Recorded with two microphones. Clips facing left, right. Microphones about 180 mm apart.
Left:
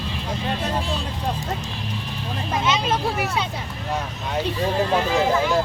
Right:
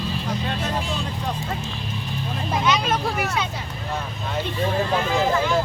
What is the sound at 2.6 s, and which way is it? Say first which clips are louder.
Speech: even; 25° left (ahead or behind).